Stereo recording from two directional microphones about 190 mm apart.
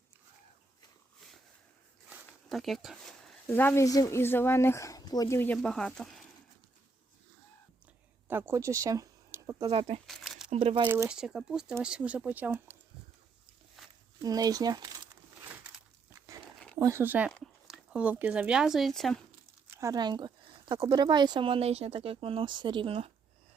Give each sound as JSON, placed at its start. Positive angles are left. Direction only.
{"t": 2.0, "sound": "speech", "side_deg": 0}
{"t": 8.3, "sound": "speech", "side_deg": -10}
{"t": 9.7, "sound": "speech", "side_deg": -30}
{"t": 10.1, "sound": "crumpling", "side_deg": 0}
{"t": 10.5, "sound": "speech", "side_deg": -30}
{"t": 10.8, "sound": "speech", "side_deg": -10}
{"t": 13.8, "sound": "a sound", "side_deg": 0}
{"t": 14.2, "sound": "speech", "side_deg": -20}
{"t": 16.7, "sound": "speech", "side_deg": -15}
{"t": 19.6, "sound": "speech", "side_deg": -15}